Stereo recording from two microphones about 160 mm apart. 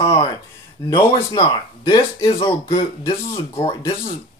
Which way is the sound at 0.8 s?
25° left (ahead or behind).